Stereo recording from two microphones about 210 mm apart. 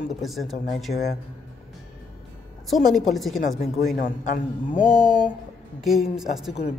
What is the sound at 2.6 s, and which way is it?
Speech, centre (ahead or behind).